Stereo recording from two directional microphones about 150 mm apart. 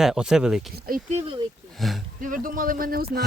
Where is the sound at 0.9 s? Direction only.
75° right (ahead or behind).